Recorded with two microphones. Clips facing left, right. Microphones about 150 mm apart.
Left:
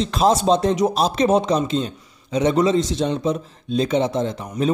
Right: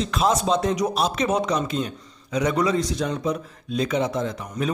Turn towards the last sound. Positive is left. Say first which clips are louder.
# left 4 dB
turn(degrees=30)  # may be behind; listen again after turning